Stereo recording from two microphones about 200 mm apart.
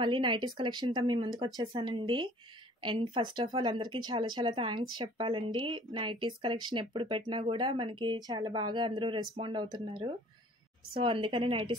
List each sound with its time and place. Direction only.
0.0 s speech: 25° right (ahead or behind)